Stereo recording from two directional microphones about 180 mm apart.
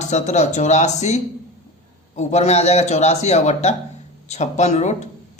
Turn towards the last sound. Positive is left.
turn(degrees=40)  # may be behind; listen again after turning